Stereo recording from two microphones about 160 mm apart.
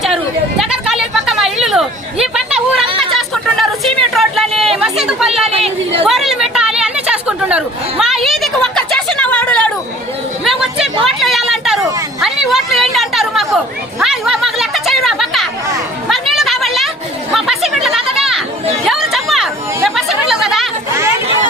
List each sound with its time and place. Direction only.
0.6 s a sound: centre (ahead or behind)
2.8 s chatter: 35° right (ahead or behind)
3.2 s a sound: centre (ahead or behind)
5.5 s chatter: 40° right (ahead or behind)
6.1 s chatter: centre (ahead or behind)
10.4 s chatter: centre (ahead or behind)
11.0 s a sound: centre (ahead or behind)
12.2 s chatter: centre (ahead or behind)
14.0 s a sound: 5° right (ahead or behind)
17.3 s chatter: centre (ahead or behind)
18.2 s children playing: centre (ahead or behind)
19.1 s chatter: centre (ahead or behind)